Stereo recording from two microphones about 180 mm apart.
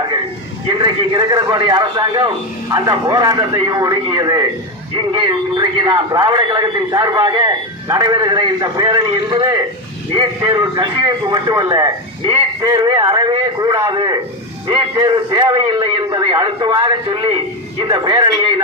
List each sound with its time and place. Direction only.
0.8 s a man's voice: 20° right (ahead or behind)